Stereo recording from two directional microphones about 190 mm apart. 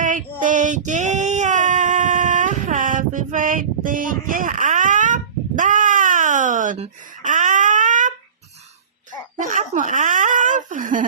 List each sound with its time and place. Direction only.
0.0 s child singing: 45° right (ahead or behind)
9.4 s speech: 40° right (ahead or behind)